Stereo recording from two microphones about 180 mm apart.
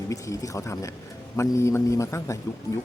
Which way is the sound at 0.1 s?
15° left (ahead or behind).